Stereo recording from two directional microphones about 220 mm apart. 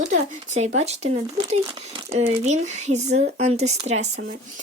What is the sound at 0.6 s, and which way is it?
Speech, 30° right (ahead or behind).